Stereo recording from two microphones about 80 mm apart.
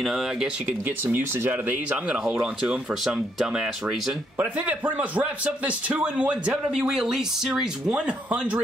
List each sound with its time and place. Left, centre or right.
0.0 s a man's voice: centre
0.7 s a man's voice: right; by 4.1 s centre
4.4 s a man's voice: centre